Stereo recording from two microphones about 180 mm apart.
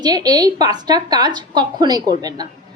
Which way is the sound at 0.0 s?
20° right (ahead or behind).